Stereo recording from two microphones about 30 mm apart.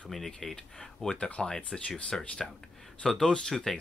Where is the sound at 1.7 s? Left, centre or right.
Left.